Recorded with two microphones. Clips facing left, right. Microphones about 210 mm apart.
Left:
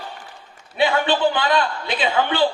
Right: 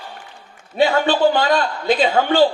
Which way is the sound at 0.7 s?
45° right (ahead or behind).